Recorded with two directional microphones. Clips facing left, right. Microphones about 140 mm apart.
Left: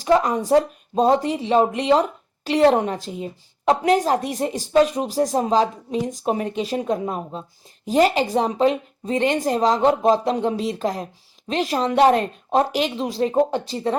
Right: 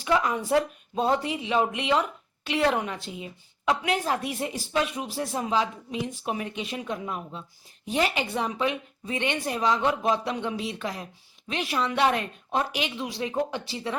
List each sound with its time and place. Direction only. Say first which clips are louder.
0.0 s speech: left 7 dB; 35° left (ahead or behind)